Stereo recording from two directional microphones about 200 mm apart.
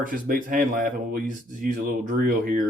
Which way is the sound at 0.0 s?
40° right (ahead or behind).